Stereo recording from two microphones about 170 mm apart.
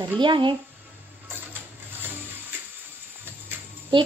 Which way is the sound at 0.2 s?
30° right (ahead or behind).